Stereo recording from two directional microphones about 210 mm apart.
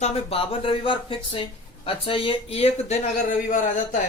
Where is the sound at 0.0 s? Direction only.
30° left (ahead or behind).